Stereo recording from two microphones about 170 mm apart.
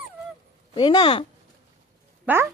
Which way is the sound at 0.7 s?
30° left (ahead or behind).